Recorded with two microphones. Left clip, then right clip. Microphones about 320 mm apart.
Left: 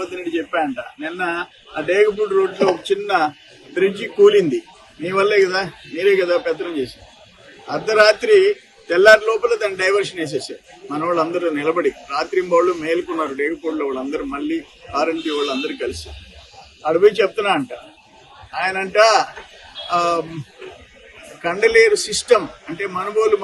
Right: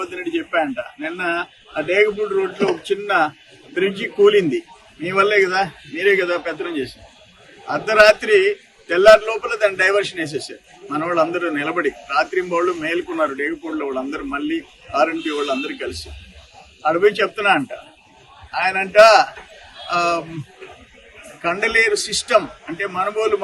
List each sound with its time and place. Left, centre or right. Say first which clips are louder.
0.0 s a man's voice: even; centre
3.8 s a man's voice: left 2 dB; centre
7.9 s a man's voice: right 1 dB; centre
21.4 s a man's voice: left 3 dB; centre